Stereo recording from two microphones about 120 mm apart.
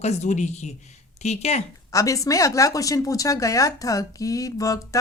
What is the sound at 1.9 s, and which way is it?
Speech, 25° left (ahead or behind).